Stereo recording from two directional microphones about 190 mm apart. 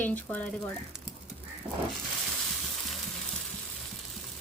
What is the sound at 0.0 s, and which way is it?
Speech, 10° left (ahead or behind).